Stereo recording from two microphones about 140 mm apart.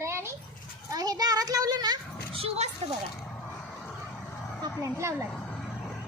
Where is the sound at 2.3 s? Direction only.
45° right (ahead or behind).